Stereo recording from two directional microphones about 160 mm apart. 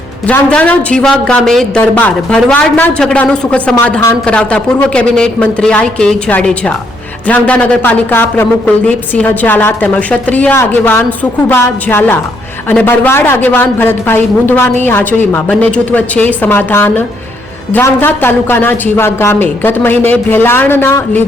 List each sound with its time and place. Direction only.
0.3 s a woman's voice: 10° left (ahead or behind)